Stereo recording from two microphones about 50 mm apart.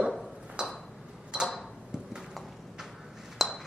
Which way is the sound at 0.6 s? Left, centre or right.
Centre.